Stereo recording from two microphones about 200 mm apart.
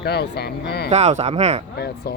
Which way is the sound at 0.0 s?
55° left (ahead or behind).